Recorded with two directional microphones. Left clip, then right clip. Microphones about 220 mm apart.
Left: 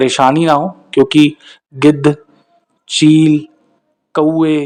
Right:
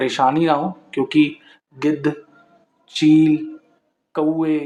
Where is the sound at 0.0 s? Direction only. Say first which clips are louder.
Left 6 dB; 35° left (ahead or behind).